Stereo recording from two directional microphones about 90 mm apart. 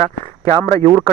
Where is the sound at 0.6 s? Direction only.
30° left (ahead or behind).